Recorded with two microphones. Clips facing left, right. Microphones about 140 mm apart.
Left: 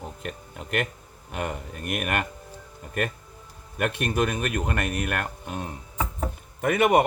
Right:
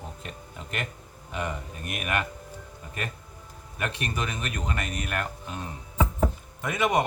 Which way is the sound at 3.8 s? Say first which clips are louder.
Left 6 dB; 55° left (ahead or behind).